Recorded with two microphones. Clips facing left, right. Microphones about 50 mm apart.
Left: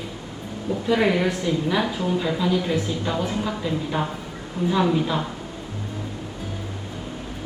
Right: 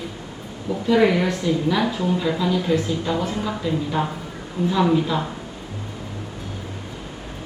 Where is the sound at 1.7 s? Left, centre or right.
Centre.